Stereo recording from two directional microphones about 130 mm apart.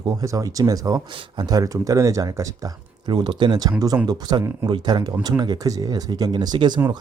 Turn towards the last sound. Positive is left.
turn(degrees=-35)  # may be behind; listen again after turning